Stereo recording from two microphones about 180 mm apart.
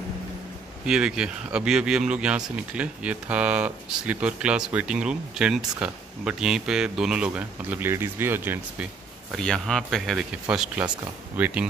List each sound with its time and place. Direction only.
0.8 s speech: 5° right (ahead or behind)
9.3 s speech: 5° left (ahead or behind)